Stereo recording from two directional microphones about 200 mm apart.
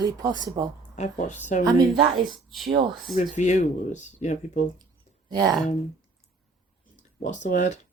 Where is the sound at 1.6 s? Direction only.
20° right (ahead or behind).